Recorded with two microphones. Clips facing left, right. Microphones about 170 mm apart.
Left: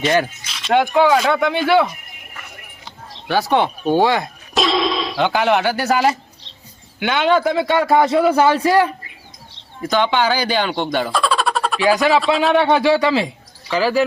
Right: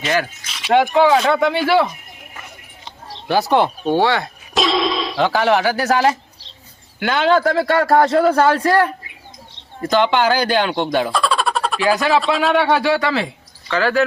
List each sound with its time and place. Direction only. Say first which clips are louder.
0.4 s a man's voice: right 1 dB; centre (ahead or behind)
3.2 s a man's voice: right 1 dB; centre (ahead or behind)
4.0 s speech: left 1 dB; 20° left (ahead or behind)
4.5 s a sound: even; centre (ahead or behind)
7.0 s a man's voice: right 1 dB; centre (ahead or behind)
11.8 s speech: left 3 dB; 10° left (ahead or behind)
12.1 s a man's voice: left 1 dB; centre (ahead or behind)
12.8 s speech: left 3 dB; 15° left (ahead or behind)